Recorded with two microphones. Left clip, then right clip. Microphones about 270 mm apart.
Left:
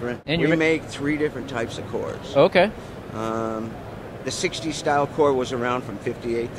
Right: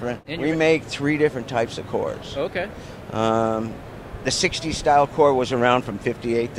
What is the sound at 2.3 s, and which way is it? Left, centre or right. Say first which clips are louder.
Speech: left 14 dB; left.